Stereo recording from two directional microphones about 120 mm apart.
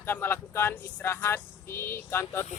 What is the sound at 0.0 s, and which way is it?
Speech, 15° left (ahead or behind).